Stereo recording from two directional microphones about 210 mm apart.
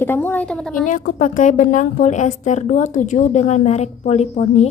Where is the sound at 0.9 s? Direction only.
40° left (ahead or behind).